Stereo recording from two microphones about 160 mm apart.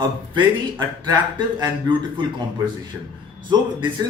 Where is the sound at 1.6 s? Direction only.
25° right (ahead or behind).